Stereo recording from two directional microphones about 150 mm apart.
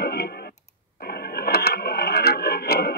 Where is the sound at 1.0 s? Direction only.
90° left.